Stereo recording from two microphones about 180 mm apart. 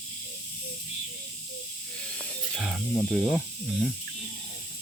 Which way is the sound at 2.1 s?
Centre (ahead or behind).